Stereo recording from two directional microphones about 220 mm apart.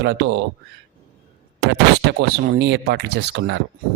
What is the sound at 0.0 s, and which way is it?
Speech, 50° right (ahead or behind).